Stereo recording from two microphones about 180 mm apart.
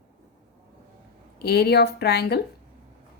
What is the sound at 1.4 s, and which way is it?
A woman's voice, 65° left (ahead or behind).